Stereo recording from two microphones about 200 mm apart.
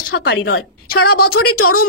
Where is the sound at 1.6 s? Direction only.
90° left.